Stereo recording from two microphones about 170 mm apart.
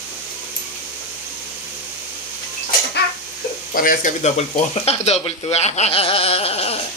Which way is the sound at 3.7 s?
55° left (ahead or behind).